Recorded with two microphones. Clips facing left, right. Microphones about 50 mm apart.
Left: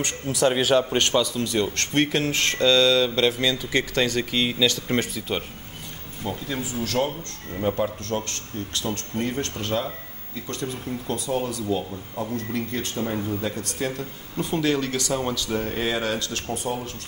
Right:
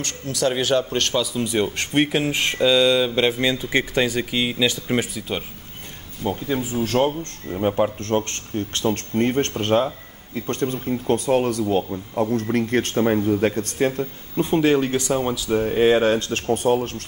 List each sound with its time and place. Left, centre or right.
0.0 s speech: centre
0.5 s speech: centre
1.2 s speech: centre
6.2 s speech: right
15.1 s speech: centre
15.8 s speech: right
16.5 s speech: right